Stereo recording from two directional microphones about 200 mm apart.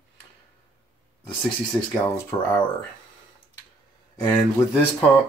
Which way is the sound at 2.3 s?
25° left (ahead or behind).